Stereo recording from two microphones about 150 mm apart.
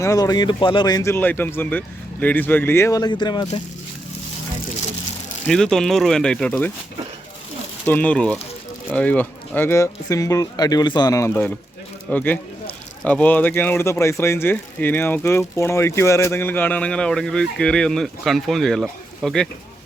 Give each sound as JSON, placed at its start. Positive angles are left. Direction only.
{"t": 0.0, "sound": "speech", "side_deg": 25}
{"t": 5.5, "sound": "speech", "side_deg": 5}
{"t": 7.9, "sound": "speech", "side_deg": 10}